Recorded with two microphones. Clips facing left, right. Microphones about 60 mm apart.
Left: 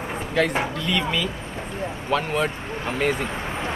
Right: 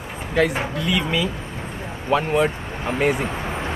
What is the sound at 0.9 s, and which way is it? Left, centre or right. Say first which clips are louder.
Speech: right 2 dB; centre.